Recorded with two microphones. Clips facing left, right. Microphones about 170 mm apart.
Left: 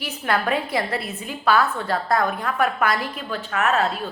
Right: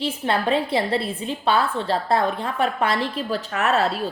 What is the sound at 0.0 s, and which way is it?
A woman's voice, 25° right (ahead or behind).